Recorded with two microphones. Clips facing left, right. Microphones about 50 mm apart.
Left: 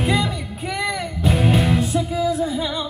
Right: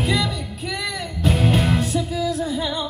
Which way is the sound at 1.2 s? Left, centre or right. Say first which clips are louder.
Left 1 dB; centre.